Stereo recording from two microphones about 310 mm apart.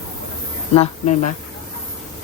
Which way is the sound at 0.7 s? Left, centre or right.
Centre.